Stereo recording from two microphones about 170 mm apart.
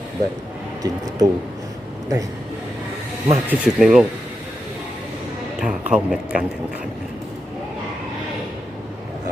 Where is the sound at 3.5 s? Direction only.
Centre (ahead or behind).